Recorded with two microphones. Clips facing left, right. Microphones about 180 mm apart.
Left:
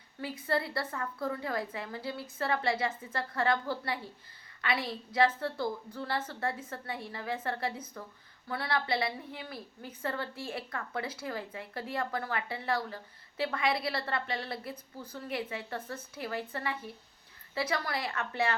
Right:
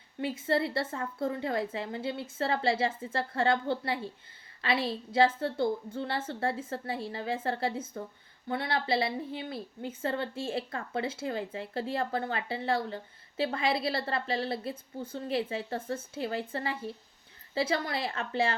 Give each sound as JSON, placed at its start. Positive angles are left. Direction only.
{"t": 0.2, "sound": "a woman's voice", "side_deg": -25}